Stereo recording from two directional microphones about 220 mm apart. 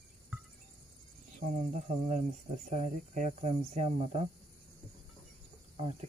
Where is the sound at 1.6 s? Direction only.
35° right (ahead or behind).